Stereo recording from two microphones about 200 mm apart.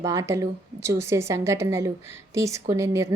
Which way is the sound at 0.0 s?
15° right (ahead or behind).